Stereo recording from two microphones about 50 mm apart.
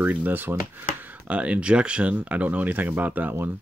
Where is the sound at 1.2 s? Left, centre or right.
Right.